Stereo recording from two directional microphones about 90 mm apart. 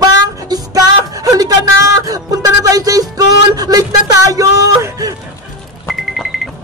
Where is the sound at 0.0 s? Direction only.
45° right (ahead or behind).